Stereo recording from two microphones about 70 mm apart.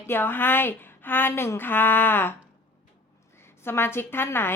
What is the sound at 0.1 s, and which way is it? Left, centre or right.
Speech, left.